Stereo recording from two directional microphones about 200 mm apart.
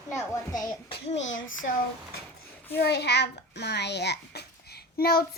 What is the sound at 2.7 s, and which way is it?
A child's voice, 55° left (ahead or behind).